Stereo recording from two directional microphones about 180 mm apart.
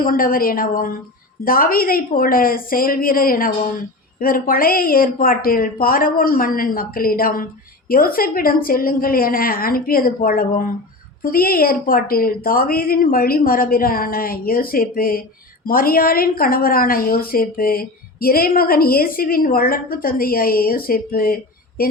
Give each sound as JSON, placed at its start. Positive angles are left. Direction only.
{"t": 0.0, "sound": "a woman's voice", "side_deg": 50}